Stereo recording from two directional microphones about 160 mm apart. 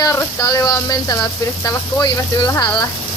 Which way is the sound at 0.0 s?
20° left (ahead or behind).